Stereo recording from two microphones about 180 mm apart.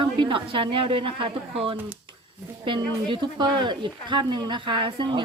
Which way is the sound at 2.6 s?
25° right (ahead or behind).